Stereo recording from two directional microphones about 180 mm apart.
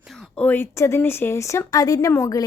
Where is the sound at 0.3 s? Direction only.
10° left (ahead or behind).